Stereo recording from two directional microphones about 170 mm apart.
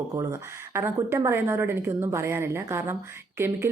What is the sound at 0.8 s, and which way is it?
Speech, 15° right (ahead or behind).